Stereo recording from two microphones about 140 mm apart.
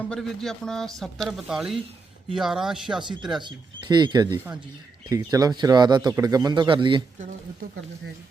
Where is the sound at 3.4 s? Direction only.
35° right (ahead or behind).